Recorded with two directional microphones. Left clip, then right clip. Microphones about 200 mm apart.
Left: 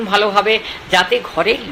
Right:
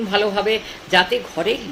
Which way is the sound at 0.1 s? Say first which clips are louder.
Left 5 dB; 15° right (ahead or behind).